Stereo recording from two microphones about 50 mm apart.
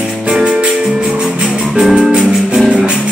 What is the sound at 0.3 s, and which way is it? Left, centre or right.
Music, centre.